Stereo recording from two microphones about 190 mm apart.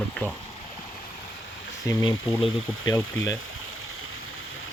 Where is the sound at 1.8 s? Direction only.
15° left (ahead or behind).